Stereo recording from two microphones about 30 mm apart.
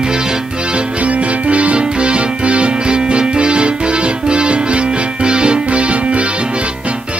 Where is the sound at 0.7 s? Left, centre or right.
Right.